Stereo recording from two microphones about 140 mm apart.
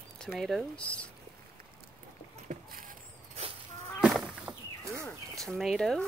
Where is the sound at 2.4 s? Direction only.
65° right (ahead or behind).